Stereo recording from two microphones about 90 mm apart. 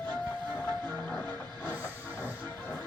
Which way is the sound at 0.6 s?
25° left (ahead or behind).